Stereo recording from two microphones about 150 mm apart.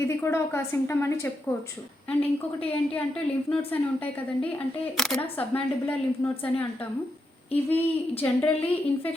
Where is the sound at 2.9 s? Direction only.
10° left (ahead or behind).